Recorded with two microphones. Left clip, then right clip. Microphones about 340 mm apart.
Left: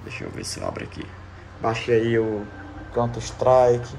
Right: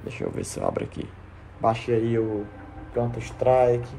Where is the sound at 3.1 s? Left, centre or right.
Right.